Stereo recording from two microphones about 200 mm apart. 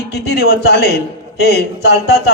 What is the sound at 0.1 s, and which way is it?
A man's voice, 55° left (ahead or behind).